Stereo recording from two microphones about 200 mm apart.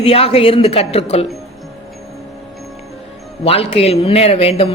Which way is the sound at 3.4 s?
30° left (ahead or behind).